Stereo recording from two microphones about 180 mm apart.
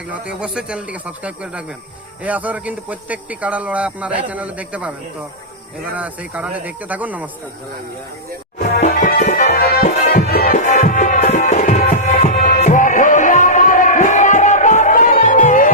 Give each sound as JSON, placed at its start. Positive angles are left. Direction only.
{"t": 0.1, "sound": "speech", "side_deg": -5}
{"t": 5.9, "sound": "speech", "side_deg": -10}
{"t": 8.5, "sound": "music", "side_deg": 50}
{"t": 9.6, "sound": "music", "side_deg": 60}